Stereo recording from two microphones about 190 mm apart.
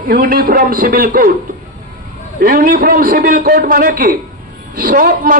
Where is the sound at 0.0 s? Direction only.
45° right (ahead or behind).